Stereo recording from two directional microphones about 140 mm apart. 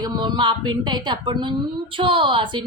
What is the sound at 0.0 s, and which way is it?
A woman's voice, 30° right (ahead or behind).